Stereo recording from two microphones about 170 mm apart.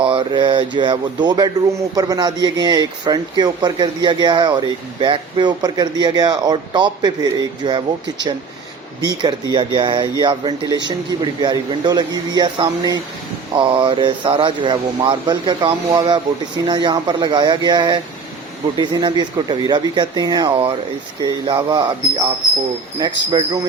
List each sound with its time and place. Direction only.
0.0 s speech: 30° right (ahead or behind)
23.0 s speech: 25° right (ahead or behind)